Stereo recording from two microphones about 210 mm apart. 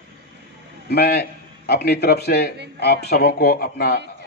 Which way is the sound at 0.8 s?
50° left (ahead or behind).